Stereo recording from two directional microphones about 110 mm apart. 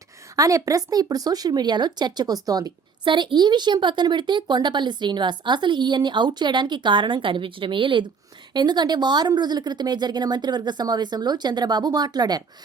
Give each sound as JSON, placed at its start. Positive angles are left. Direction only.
{"t": 0.3, "sound": "speech", "side_deg": -30}